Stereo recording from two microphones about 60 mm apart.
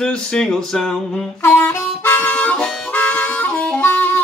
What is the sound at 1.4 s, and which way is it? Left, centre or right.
Harmonica, left.